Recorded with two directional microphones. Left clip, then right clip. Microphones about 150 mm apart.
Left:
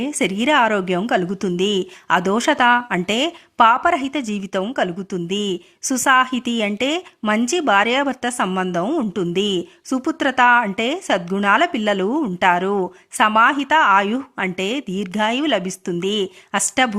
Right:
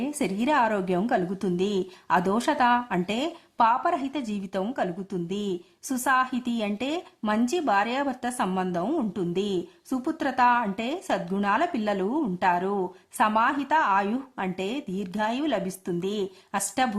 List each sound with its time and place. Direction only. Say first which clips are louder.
0.2 s a woman's voice: left 8 dB; 20° left (ahead or behind)